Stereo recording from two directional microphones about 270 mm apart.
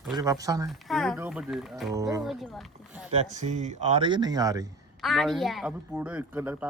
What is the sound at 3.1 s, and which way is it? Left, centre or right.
Speech, right.